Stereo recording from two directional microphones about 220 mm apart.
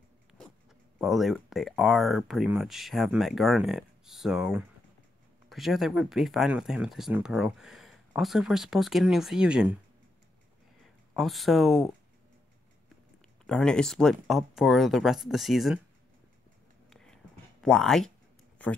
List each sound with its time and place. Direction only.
0.9 s speech: centre (ahead or behind)
10.8 s speech: centre (ahead or behind)
13.5 s speech: 5° left (ahead or behind)
16.9 s whispering: 5° left (ahead or behind)